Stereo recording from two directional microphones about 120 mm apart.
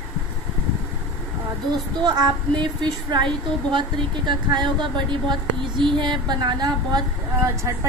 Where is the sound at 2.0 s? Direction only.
35° right (ahead or behind).